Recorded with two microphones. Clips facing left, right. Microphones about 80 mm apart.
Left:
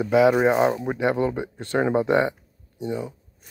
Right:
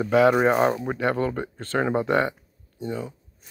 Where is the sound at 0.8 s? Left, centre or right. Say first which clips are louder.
Left 2 dB; centre.